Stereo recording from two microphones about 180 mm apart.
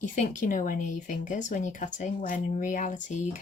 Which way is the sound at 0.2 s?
45° left (ahead or behind).